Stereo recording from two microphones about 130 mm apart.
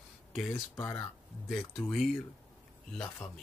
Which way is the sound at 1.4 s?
Centre (ahead or behind).